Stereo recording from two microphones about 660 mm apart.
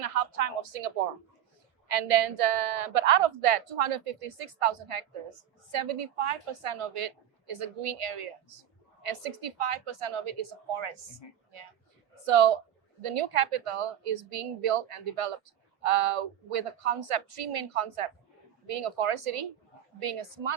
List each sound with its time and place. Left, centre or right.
0.0 s a woman's voice: right
12.2 s a woman's voice: right